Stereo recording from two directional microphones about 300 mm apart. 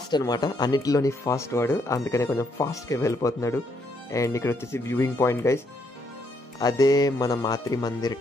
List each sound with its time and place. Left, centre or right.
0.1 s speech: centre
6.6 s speech: centre